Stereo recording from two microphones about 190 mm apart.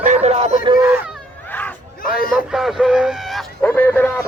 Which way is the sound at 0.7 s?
10° right (ahead or behind).